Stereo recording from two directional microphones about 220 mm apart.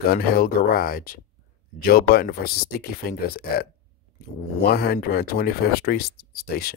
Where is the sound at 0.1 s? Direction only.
40° left (ahead or behind).